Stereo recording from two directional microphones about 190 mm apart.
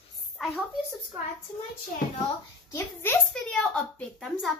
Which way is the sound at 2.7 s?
10° left (ahead or behind).